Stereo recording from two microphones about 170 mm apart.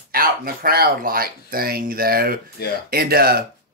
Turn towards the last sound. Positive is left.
turn(degrees=-65)  # may be behind; listen again after turning